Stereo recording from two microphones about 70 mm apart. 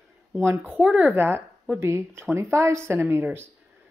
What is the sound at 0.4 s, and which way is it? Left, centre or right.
Speech, right.